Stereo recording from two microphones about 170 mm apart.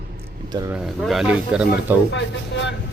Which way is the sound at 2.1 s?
90° left.